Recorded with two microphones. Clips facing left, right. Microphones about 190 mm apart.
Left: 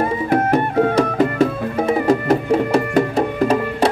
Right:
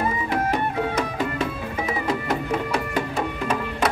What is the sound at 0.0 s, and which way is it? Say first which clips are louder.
Music: left 6 dB; 50° left (ahead or behind).